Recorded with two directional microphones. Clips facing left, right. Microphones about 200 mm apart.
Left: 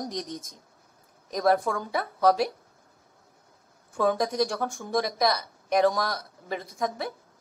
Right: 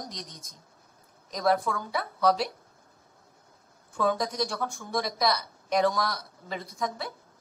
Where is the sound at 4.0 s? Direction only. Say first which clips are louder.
Left 3 dB; 50° left (ahead or behind).